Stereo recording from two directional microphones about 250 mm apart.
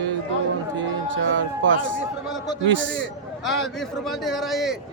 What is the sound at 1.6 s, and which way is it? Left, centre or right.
A man's voice, right.